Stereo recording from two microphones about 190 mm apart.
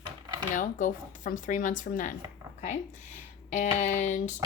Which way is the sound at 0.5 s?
45° left (ahead or behind).